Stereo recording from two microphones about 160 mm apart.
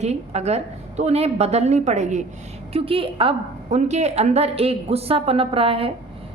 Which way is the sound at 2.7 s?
35° right (ahead or behind).